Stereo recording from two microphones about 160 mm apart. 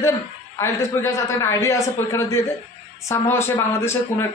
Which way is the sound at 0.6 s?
15° left (ahead or behind).